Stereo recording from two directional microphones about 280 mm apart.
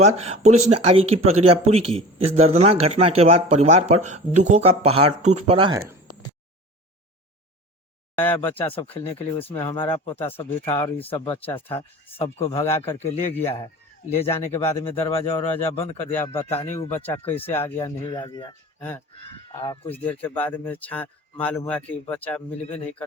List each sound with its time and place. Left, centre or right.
0.2 s speech: right
8.1 s speech: centre
8.7 s speech: centre
11.5 s speech: centre
13.0 s speech: left
14.5 s speech: centre
16.1 s speech: centre
19.6 s speech: centre
20.1 s speech: centre